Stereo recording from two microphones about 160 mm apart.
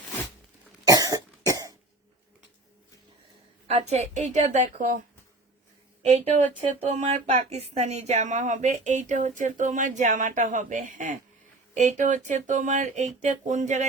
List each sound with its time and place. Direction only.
0.9 s cough: 20° right (ahead or behind)
3.7 s speech: 40° right (ahead or behind)
6.0 s a woman's voice: 45° right (ahead or behind)